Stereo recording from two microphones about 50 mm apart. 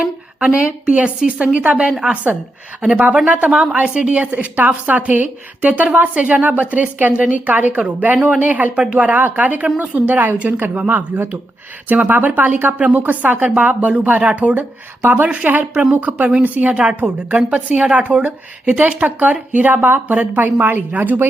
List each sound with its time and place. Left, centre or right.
0.3 s a woman's voice: right
3.2 s a woman's voice: right
3.5 s a woman's voice: centre; by 15.6 s right
15.6 s a woman's voice: centre
15.9 s a woman's voice: right